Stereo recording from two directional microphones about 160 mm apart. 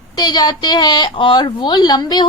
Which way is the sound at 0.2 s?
25° left (ahead or behind).